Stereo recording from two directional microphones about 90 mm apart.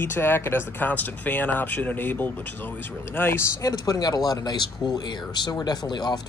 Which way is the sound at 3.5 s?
40° left (ahead or behind).